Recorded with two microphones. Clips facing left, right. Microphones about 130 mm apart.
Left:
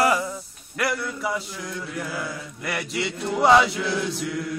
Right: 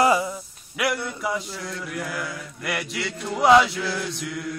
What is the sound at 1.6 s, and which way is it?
Mantra, 15° left (ahead or behind).